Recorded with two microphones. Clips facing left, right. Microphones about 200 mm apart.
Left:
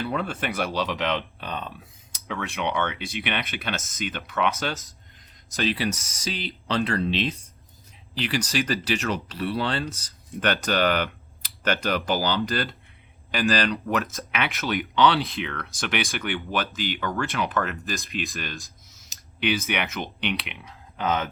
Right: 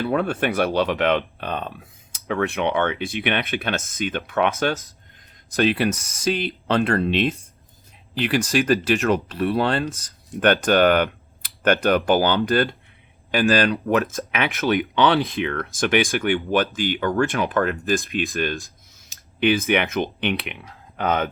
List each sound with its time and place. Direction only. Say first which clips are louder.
0.0 s speech: right 6 dB; 50° right (ahead or behind)